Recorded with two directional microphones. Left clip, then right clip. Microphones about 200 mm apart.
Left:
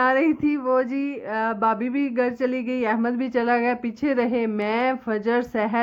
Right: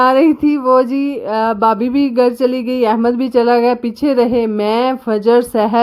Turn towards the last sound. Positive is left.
turn(degrees=-45)  # may be behind; listen again after turning